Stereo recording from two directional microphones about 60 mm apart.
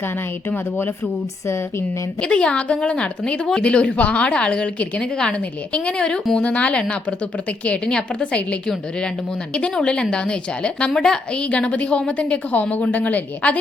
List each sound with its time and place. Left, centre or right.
2.2 s a woman's voice: centre
11.4 s a woman's voice: left